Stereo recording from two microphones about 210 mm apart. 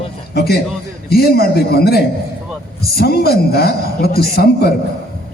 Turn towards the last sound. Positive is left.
turn(degrees=45)  # may be behind; listen again after turning